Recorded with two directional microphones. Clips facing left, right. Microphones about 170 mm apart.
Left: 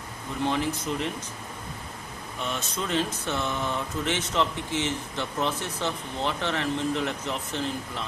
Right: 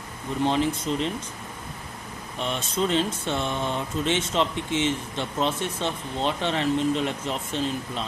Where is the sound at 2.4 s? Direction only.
25° right (ahead or behind).